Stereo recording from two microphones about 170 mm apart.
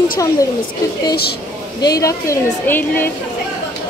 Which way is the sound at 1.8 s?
20° left (ahead or behind).